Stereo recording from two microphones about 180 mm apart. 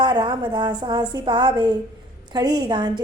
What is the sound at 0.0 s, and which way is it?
Speech, 25° right (ahead or behind).